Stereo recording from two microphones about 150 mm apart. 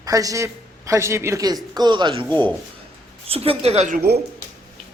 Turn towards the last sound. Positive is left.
turn(degrees=-75)  # may be behind; listen again after turning